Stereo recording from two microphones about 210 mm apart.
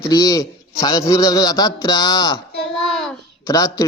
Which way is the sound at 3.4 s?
15° left (ahead or behind).